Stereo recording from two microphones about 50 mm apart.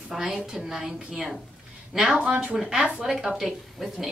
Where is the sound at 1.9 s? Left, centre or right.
Centre.